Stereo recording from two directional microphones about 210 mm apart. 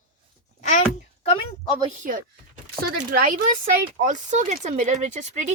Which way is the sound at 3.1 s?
40° right (ahead or behind).